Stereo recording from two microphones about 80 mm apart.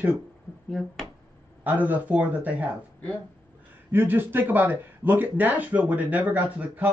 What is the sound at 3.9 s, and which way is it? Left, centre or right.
Speech, right.